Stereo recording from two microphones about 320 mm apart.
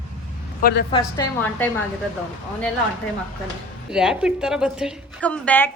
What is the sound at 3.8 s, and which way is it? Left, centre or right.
A woman's voice, centre.